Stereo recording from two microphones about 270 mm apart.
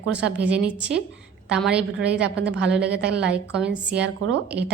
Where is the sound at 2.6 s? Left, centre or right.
Centre.